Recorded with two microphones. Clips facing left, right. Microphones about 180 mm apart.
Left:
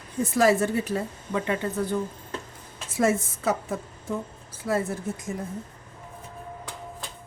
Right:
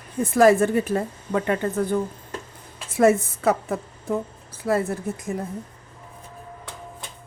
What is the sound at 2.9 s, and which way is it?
A woman's voice, 60° right (ahead or behind).